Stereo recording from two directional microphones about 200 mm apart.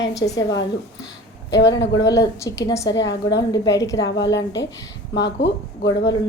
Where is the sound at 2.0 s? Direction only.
15° left (ahead or behind).